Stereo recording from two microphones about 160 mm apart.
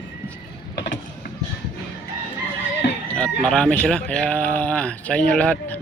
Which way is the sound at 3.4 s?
5° left (ahead or behind).